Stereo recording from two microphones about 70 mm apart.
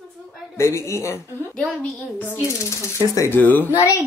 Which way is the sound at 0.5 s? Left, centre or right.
Left.